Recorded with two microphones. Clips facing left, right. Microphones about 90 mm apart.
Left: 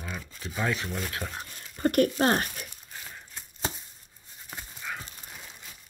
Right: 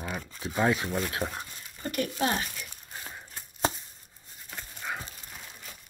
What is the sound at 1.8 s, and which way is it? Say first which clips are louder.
Speech: left 7 dB; 50° left (ahead or behind).